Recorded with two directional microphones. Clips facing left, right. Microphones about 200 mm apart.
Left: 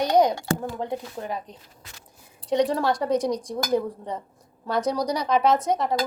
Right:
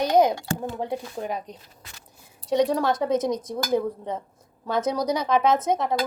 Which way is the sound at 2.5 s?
Centre (ahead or behind).